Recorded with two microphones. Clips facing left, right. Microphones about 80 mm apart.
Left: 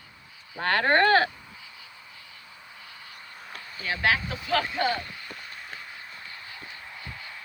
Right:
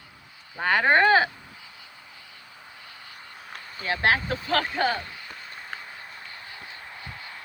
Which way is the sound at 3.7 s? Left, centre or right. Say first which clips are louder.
Right 2 dB; right.